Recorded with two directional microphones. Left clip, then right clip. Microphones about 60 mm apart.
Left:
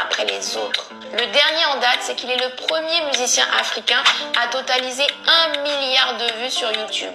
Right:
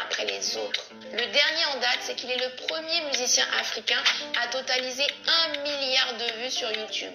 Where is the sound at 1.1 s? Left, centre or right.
Left.